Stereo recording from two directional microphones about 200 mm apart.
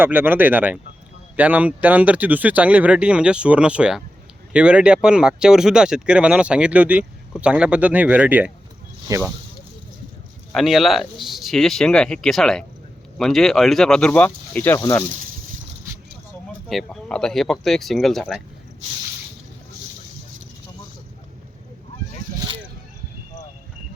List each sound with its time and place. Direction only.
0.0 s speech: 10° right (ahead or behind)
10.5 s speech: centre (ahead or behind)
16.5 s speech: centre (ahead or behind)